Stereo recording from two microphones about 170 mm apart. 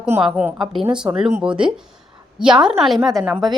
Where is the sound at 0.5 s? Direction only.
30° right (ahead or behind).